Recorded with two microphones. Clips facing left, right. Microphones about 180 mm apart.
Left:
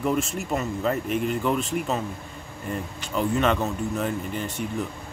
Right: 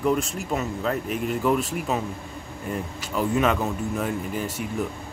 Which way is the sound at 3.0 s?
5° right (ahead or behind).